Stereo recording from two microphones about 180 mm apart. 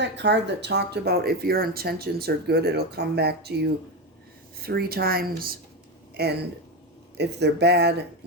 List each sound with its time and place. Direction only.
0.0 s speech: 75° right (ahead or behind)